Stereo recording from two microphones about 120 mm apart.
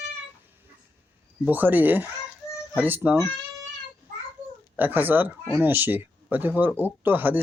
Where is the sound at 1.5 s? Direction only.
15° right (ahead or behind).